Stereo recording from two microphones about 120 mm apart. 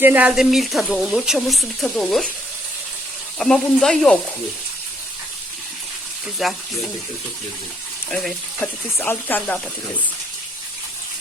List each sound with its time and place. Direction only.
0.0 s speech: 15° right (ahead or behind)
0.3 s speech: centre (ahead or behind)
3.3 s speech: 5° left (ahead or behind)
6.2 s speech: centre (ahead or behind)
8.1 s speech: centre (ahead or behind)
8.6 s speech: 15° left (ahead or behind)